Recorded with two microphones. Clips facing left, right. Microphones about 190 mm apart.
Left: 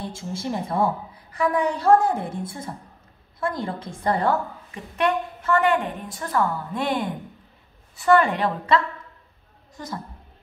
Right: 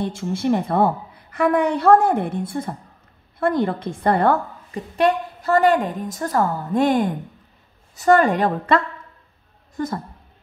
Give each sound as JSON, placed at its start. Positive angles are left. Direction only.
{"t": 0.0, "sound": "a woman's voice", "side_deg": -65}
{"t": 4.7, "sound": "a woman's voice", "side_deg": -35}